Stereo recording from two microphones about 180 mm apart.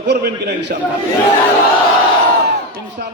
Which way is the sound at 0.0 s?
65° right (ahead or behind).